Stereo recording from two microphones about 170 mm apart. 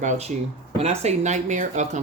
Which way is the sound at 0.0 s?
45° right (ahead or behind).